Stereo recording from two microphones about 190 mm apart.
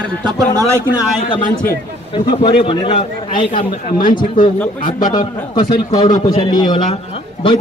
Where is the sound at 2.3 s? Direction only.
25° left (ahead or behind).